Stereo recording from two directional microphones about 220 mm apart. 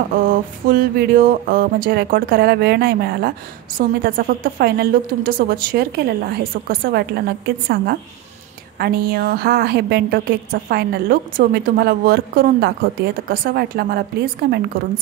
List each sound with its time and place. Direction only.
0.3 s speech: 40° right (ahead or behind)